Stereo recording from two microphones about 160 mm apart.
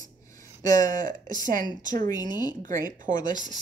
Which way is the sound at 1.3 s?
55° right (ahead or behind).